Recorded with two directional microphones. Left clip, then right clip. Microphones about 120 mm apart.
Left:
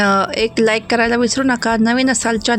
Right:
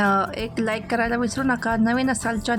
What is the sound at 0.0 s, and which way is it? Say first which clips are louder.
Speech: left 7 dB; 30° left (ahead or behind).